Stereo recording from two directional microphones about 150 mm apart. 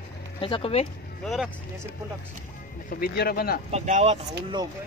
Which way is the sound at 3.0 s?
90° left.